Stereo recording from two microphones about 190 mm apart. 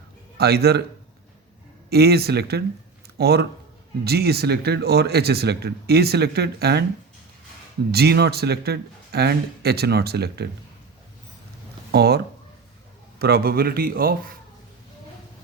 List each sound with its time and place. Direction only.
0.3 s a man's voice: 55° right (ahead or behind)
1.9 s speech: 55° right (ahead or behind)
7.9 s speech: 60° right (ahead or behind)
11.9 s a man's voice: 60° right (ahead or behind)